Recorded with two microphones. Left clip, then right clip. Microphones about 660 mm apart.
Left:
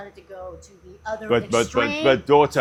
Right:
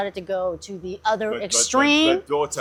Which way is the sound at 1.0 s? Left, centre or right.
Right.